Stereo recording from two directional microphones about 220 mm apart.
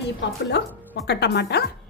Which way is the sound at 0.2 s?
50° left (ahead or behind).